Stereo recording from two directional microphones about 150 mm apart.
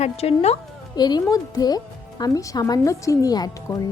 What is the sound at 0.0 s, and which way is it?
Speech, 45° left (ahead or behind).